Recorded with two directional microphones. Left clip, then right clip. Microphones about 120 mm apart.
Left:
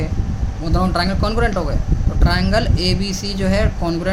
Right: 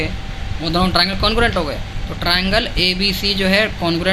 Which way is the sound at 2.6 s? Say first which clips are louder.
Right 5 dB; 45° left (ahead or behind).